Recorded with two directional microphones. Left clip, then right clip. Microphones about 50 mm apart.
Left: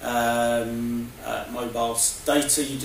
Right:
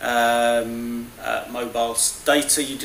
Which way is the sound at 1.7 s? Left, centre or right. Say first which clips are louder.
Right 2 dB; right.